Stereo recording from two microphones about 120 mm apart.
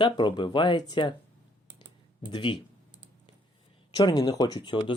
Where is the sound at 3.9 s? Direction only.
30° left (ahead or behind).